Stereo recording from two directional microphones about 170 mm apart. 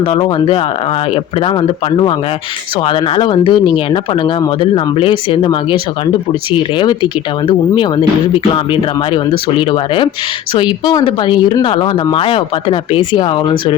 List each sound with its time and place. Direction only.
0.0 s speech: 30° left (ahead or behind)
2.8 s speech: 30° left (ahead or behind)
6.6 s speech: 25° left (ahead or behind)